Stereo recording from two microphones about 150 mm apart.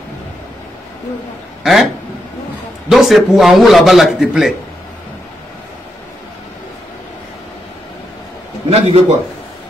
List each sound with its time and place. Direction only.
1.6 s speech: centre (ahead or behind)
2.9 s a man's voice: centre (ahead or behind)
8.6 s a man's voice: 45° right (ahead or behind)